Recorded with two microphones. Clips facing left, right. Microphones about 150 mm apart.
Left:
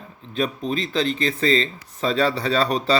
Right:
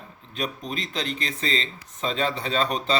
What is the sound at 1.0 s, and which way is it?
Speech, 30° left (ahead or behind).